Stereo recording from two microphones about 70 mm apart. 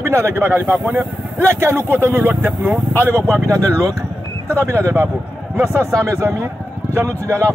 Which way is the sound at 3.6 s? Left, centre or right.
Right.